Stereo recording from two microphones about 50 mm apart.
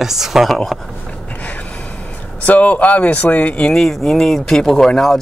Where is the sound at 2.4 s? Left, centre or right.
Left.